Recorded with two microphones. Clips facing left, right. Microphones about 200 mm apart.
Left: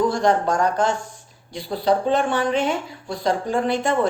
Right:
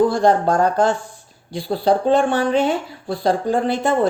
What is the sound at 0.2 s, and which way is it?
Speech, 35° right (ahead or behind).